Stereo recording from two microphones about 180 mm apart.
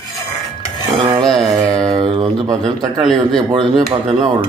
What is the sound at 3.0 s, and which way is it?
Speech, 5° left (ahead or behind).